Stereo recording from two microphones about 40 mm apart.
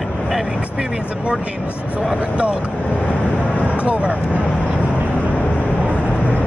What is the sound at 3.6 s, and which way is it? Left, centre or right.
Vehicle, left.